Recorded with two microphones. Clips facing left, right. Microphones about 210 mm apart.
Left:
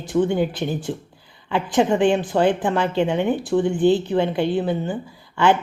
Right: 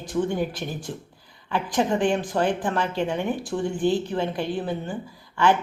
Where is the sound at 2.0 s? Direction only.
25° left (ahead or behind).